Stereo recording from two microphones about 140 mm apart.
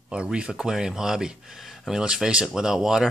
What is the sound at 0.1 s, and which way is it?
Speech, 5° right (ahead or behind).